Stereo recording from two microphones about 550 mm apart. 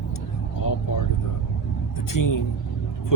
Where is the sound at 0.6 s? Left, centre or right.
Left.